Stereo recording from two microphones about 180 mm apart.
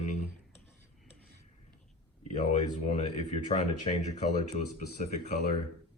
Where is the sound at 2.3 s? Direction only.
35° left (ahead or behind).